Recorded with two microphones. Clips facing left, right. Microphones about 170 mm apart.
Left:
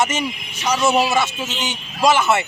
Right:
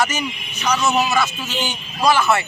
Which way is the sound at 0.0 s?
25° left (ahead or behind).